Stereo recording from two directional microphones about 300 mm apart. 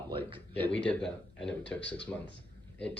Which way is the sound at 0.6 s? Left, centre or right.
Centre.